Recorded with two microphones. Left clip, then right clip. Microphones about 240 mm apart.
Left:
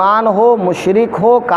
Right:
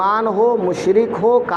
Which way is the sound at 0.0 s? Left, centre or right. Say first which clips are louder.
Left 5 dB; left.